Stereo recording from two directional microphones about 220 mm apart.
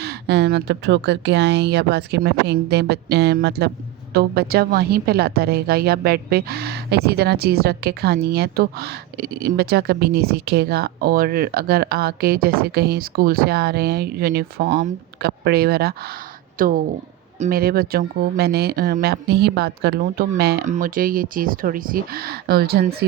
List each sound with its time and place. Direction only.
0.0 s a woman's voice: 50° right (ahead or behind)